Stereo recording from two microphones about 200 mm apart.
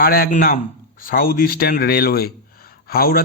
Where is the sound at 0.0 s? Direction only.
50° left (ahead or behind).